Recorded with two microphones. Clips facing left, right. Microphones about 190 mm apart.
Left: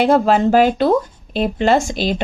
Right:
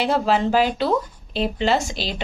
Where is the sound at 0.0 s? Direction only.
50° left (ahead or behind).